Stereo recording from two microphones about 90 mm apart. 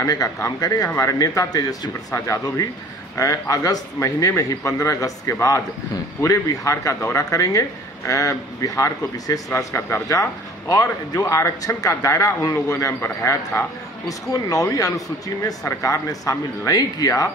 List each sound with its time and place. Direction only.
0.0 s speech: 40° left (ahead or behind)
2.1 s speech: 30° left (ahead or behind)
10.7 s speech: 40° left (ahead or behind)